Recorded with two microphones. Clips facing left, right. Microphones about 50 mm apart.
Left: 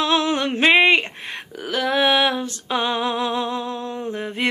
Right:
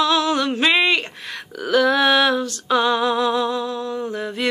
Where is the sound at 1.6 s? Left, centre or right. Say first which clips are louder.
Right 4 dB; centre.